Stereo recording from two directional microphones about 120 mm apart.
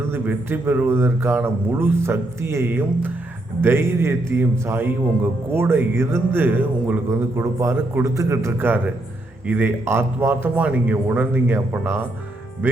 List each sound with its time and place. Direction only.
0.1 s a man's voice: 15° right (ahead or behind)
7.1 s a man's voice: 25° right (ahead or behind)